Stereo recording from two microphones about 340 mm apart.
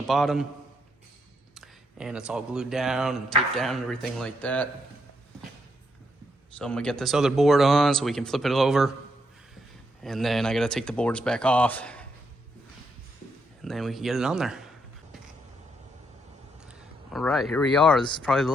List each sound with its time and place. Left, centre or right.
0.1 s speech: centre
1.5 s speech: centre
6.6 s speech: centre
10.0 s speech: centre
13.6 s speech: centre
16.6 s speech: centre